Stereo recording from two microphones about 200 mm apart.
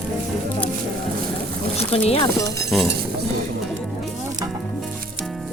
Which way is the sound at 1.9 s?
30° left (ahead or behind).